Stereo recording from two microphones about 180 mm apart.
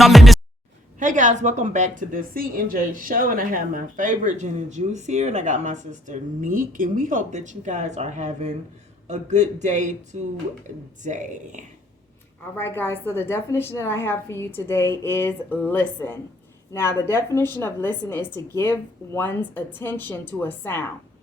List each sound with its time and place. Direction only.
0.0 s music: centre (ahead or behind)
0.9 s a woman's voice: 45° right (ahead or behind)
12.5 s a woman's voice: 10° left (ahead or behind)